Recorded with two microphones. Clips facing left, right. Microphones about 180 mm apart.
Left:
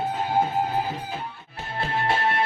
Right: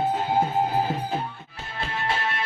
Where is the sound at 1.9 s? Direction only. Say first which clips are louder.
Left 4 dB; 60° left (ahead or behind).